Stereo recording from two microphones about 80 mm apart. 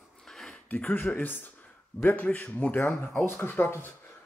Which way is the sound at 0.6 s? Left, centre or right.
Centre.